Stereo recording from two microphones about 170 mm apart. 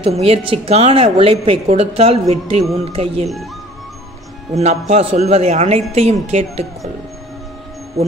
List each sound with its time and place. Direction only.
0.0 s speech: 35° right (ahead or behind)
4.6 s speech: 40° right (ahead or behind)